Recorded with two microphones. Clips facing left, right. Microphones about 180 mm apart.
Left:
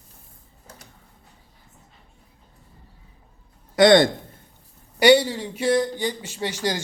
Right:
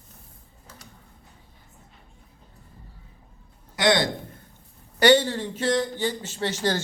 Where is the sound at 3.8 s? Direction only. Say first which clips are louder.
Left 7 dB; 50° left (ahead or behind).